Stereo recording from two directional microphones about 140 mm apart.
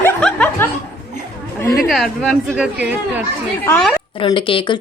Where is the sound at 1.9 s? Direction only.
Centre (ahead or behind).